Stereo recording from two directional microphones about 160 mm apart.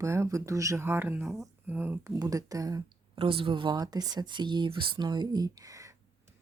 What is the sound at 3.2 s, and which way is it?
Speech, 35° right (ahead or behind).